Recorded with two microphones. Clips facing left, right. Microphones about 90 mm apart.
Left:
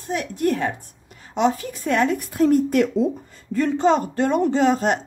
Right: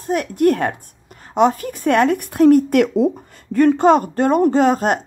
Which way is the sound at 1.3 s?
50° right (ahead or behind).